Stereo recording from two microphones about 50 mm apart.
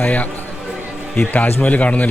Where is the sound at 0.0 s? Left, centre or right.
Left.